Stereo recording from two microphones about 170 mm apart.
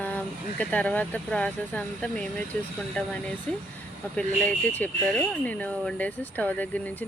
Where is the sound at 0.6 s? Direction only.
10° left (ahead or behind).